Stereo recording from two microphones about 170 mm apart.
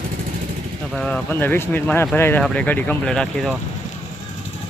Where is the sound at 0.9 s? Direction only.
5° left (ahead or behind).